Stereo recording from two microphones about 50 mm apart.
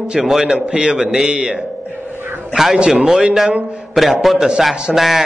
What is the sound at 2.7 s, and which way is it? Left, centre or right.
A man's voice, centre.